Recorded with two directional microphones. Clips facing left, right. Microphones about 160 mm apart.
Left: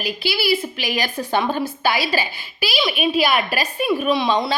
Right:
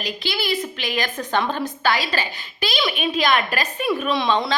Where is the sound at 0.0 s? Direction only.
10° left (ahead or behind).